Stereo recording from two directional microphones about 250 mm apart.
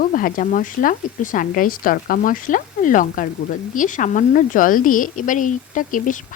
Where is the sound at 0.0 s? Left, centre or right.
Left.